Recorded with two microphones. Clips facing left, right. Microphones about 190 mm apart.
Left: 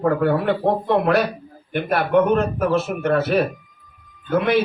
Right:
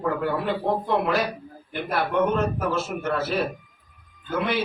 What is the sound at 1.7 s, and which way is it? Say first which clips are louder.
A man's voice: left 6 dB; 60° left (ahead or behind).